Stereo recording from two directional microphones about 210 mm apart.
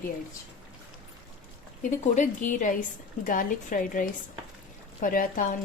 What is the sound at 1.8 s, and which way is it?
Speech, 35° left (ahead or behind).